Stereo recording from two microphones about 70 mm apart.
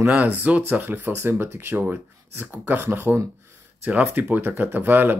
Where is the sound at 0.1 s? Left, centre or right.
Right.